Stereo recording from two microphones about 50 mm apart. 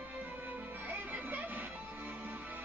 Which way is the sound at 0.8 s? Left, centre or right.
Right.